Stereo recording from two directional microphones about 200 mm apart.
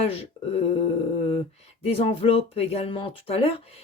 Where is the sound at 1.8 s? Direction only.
30° left (ahead or behind).